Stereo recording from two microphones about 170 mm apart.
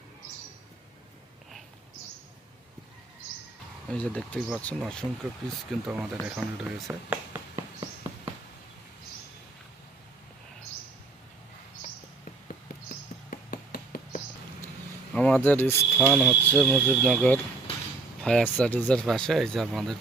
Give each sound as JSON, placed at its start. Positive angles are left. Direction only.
{"t": 3.8, "sound": "speech", "side_deg": 5}
{"t": 13.3, "sound": "a sound", "side_deg": 60}
{"t": 15.1, "sound": "speech", "side_deg": 5}
{"t": 16.0, "sound": "speech", "side_deg": 0}